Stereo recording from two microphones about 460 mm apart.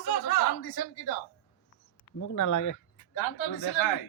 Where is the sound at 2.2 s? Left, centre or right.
Left.